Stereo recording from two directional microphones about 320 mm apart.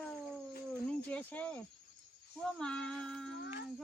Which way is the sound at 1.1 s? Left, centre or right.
Centre.